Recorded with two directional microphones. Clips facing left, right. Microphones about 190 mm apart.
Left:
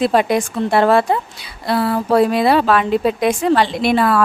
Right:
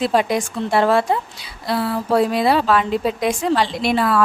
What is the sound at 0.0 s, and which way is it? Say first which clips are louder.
A woman's voice: left 3 dB; 60° left (ahead or behind).